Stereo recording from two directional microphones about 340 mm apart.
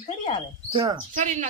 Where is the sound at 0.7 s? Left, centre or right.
Centre.